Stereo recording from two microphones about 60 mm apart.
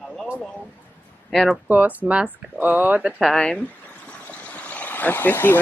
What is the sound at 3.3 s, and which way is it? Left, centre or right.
Speech, centre.